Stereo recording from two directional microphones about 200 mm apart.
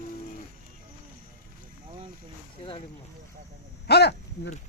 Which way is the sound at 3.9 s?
55° left (ahead or behind).